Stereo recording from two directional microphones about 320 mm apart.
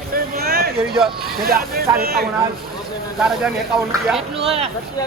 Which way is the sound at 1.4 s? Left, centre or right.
Right.